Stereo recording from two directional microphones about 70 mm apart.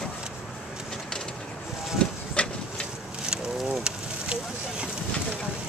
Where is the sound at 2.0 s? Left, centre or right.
Centre.